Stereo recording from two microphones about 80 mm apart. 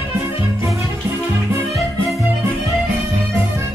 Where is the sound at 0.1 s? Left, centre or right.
Right.